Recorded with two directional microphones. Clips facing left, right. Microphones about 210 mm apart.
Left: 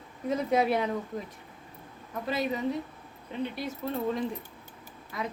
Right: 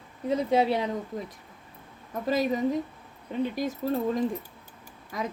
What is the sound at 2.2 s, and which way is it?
Speech, 40° right (ahead or behind).